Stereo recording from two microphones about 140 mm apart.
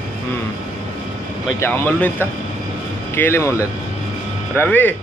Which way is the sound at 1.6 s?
15° left (ahead or behind).